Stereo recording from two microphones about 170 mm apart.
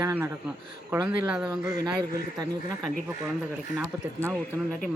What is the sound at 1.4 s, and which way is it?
Speech, 20° right (ahead or behind).